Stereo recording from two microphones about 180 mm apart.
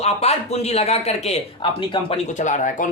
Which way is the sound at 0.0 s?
35° left (ahead or behind).